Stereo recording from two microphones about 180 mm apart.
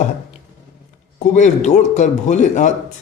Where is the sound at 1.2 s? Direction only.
40° left (ahead or behind).